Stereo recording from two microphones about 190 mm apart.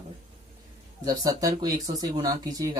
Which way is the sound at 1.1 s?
20° right (ahead or behind).